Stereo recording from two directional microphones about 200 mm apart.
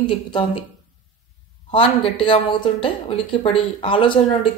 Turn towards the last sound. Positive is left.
turn(degrees=25)  # may be behind; listen again after turning